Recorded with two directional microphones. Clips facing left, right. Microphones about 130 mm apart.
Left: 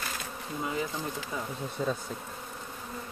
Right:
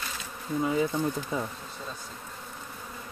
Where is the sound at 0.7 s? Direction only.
25° right (ahead or behind).